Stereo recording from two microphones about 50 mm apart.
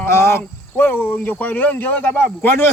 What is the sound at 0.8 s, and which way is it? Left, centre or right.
Speech, left.